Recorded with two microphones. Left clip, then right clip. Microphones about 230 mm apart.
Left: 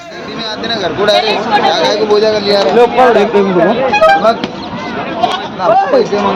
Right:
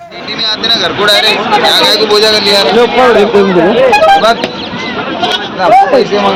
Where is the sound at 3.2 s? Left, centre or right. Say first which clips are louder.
Right 3 dB; centre.